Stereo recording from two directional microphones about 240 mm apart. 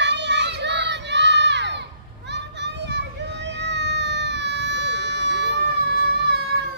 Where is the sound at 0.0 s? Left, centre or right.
Right.